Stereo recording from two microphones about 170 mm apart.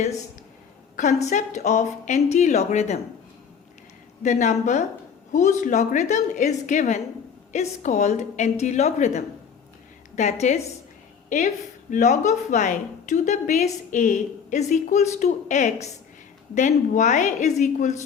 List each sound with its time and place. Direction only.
0.9 s speech: 45° left (ahead or behind)
4.2 s speech: 45° left (ahead or behind)